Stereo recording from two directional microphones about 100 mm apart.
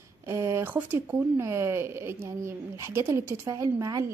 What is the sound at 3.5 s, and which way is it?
Speech, 35° right (ahead or behind).